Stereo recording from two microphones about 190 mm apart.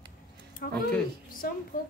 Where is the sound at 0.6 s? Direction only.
55° left (ahead or behind).